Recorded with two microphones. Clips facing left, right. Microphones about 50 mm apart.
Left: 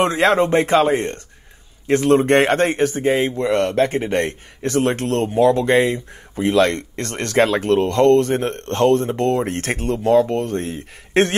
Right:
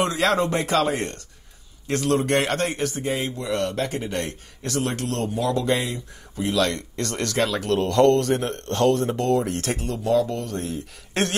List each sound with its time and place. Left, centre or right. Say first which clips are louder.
0.0 s a man's voice: left 5 dB; left